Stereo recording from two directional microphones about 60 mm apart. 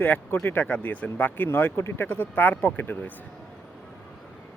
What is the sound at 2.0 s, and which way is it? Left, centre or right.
Speech, left.